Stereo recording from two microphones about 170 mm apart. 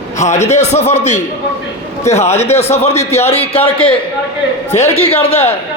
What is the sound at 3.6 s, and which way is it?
Speech, 10° left (ahead or behind).